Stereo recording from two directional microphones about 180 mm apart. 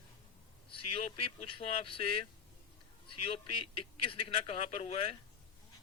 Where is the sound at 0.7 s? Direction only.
30° left (ahead or behind).